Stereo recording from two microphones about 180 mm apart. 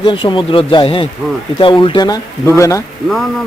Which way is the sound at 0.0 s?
25° left (ahead or behind).